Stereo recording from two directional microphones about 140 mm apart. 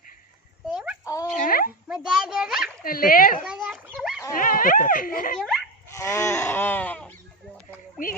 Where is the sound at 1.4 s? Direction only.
90° left.